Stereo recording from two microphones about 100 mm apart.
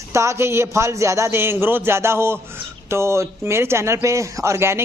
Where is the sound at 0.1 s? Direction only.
30° right (ahead or behind).